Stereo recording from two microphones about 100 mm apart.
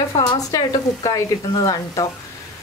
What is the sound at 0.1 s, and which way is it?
Speech, 90° left.